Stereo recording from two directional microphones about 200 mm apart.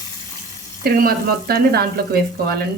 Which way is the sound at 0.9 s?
50° right (ahead or behind).